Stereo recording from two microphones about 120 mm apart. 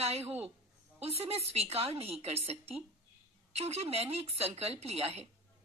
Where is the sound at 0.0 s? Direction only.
60° right (ahead or behind).